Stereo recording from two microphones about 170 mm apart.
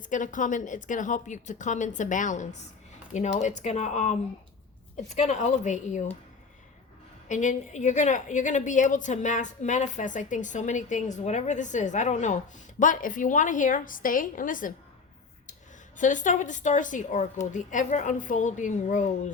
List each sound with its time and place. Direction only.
0.0 s a woman's voice: 50° left (ahead or behind)
7.3 s a woman's voice: 45° left (ahead or behind)
16.0 s a woman's voice: 50° left (ahead or behind)